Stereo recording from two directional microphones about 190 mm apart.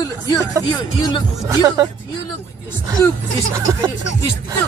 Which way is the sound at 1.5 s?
15° right (ahead or behind).